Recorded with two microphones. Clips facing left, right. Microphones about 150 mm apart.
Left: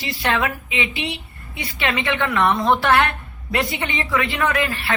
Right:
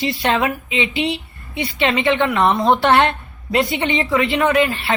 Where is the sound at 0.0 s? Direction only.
25° right (ahead or behind).